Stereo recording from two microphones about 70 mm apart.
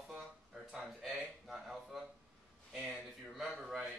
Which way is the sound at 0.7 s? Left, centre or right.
Centre.